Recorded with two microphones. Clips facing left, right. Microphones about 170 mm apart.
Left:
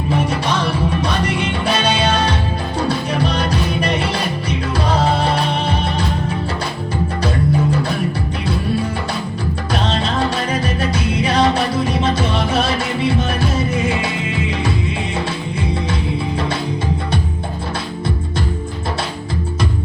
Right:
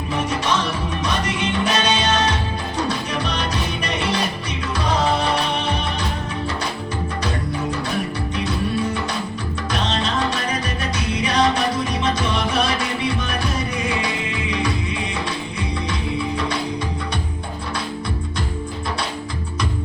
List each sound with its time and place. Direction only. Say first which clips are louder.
0.3 s music: left 2 dB; 30° left (ahead or behind)
9.7 s music: left 3 dB; 30° left (ahead or behind)